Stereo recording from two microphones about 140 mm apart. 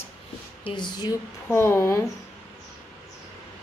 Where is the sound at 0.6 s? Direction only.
30° left (ahead or behind).